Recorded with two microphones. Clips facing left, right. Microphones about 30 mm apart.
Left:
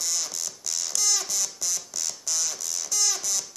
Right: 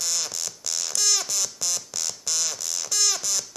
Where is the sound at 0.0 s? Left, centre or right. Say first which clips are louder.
Right 2 dB; right.